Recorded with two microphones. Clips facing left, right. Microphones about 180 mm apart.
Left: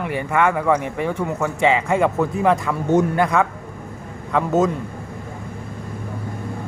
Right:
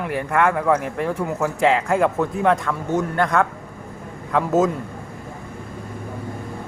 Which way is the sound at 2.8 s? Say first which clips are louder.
Left 6 dB; 20° left (ahead or behind).